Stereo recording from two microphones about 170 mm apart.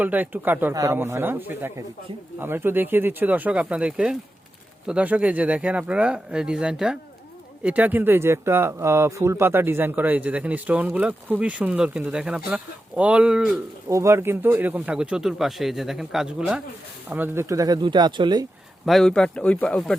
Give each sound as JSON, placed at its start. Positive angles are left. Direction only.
{"t": 0.0, "sound": "speech", "side_deg": -10}
{"t": 13.8, "sound": "speech", "side_deg": -15}
{"t": 18.9, "sound": "speech", "side_deg": 0}